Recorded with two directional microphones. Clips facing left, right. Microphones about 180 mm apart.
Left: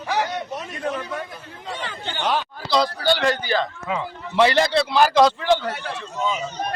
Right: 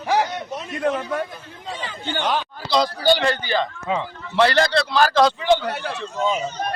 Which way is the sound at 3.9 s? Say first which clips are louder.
Right 3 dB; 30° right (ahead or behind).